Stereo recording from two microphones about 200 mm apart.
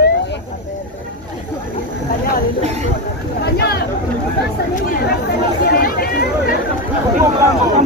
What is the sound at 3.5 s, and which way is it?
Chatter, 50° left (ahead or behind).